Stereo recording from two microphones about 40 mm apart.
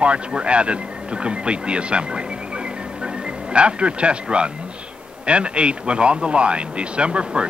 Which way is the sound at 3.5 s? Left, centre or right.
Right.